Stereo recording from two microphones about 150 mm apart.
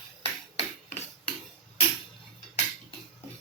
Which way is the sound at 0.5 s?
50° left (ahead or behind).